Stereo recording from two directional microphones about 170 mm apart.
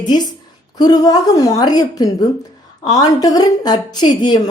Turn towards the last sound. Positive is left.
turn(degrees=25)  # may be behind; listen again after turning